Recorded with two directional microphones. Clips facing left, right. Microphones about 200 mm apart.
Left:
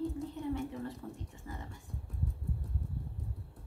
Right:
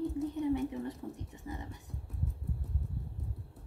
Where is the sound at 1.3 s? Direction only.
15° right (ahead or behind).